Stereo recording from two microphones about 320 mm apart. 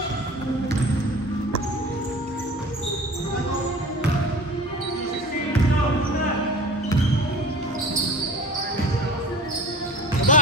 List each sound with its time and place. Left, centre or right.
10.3 s music: left